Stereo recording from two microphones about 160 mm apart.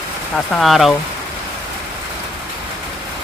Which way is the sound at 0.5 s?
Centre (ahead or behind).